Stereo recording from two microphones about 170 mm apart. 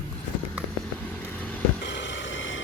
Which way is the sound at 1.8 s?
90° left.